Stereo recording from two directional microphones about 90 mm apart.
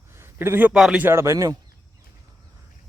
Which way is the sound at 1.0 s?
30° right (ahead or behind).